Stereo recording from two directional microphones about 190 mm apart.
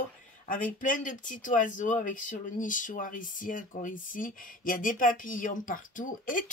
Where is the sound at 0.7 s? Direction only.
45° left (ahead or behind).